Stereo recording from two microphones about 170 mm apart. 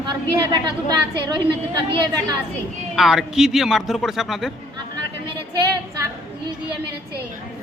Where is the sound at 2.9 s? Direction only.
5° right (ahead or behind).